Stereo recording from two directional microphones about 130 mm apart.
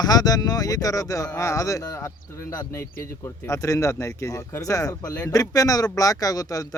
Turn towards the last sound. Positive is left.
turn(degrees=25)  # may be behind; listen again after turning